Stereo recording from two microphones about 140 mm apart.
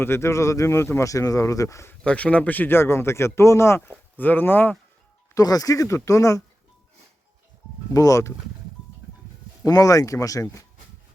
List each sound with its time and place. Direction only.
0.0 s speech: 20° left (ahead or behind)
2.0 s speech: 10° left (ahead or behind)
5.3 s speech: 25° left (ahead or behind)
7.9 s speech: 25° left (ahead or behind)
9.6 s speech: 25° left (ahead or behind)